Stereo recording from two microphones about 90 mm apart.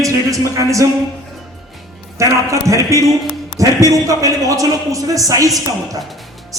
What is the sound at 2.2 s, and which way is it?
Speech, 35° right (ahead or behind).